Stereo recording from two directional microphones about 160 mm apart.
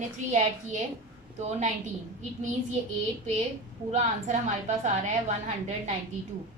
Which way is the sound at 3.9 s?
45° right (ahead or behind).